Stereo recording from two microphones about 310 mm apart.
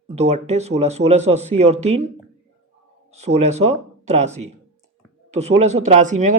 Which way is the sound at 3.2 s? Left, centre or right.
Right.